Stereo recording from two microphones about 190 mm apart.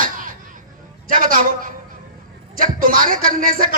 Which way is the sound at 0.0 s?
45° right (ahead or behind).